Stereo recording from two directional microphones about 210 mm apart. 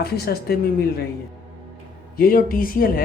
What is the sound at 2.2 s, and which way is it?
Speech, 45° left (ahead or behind).